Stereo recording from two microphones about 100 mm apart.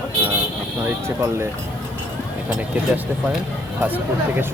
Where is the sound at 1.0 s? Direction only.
25° right (ahead or behind).